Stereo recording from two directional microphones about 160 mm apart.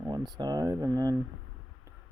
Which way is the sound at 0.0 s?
25° right (ahead or behind).